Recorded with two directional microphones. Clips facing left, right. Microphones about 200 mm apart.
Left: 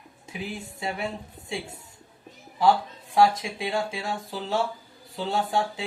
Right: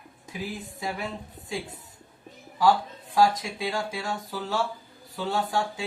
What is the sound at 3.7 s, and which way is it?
Speech, 30° left (ahead or behind).